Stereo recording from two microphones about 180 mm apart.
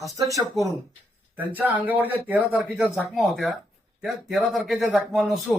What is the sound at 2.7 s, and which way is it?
Speech, 5° right (ahead or behind).